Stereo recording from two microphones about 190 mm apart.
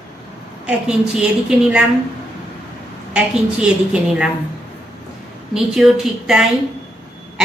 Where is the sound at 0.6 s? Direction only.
5° right (ahead or behind).